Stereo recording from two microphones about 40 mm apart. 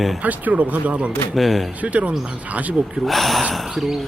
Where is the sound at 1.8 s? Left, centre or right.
Right.